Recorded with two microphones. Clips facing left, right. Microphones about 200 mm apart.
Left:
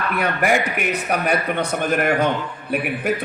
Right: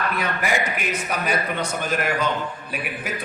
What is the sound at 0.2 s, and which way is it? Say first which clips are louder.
A man's voice: left 9 dB; 55° left (ahead or behind).